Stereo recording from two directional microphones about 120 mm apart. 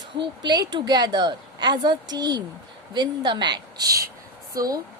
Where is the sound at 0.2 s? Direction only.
35° right (ahead or behind).